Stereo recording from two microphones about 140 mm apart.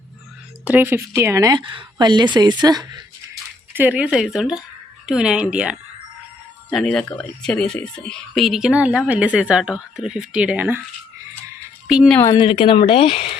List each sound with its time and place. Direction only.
0.6 s speech: 15° right (ahead or behind); by 3.0 s 30° right (ahead or behind)
3.7 s speech: 15° right (ahead or behind)
11.9 s speech: 5° right (ahead or behind)
12.2 s speech: 30° left (ahead or behind)